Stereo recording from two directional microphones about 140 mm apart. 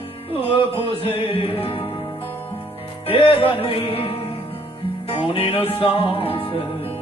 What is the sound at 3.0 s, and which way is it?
Music, 40° left (ahead or behind).